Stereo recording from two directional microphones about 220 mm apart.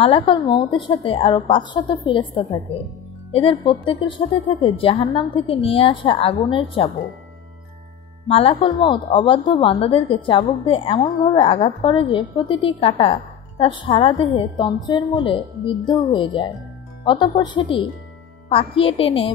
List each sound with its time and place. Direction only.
0.0 s a woman's voice: 25° left (ahead or behind)
8.3 s a woman's voice: 25° left (ahead or behind)